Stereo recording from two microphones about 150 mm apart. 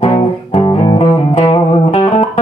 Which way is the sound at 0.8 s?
35° left (ahead or behind).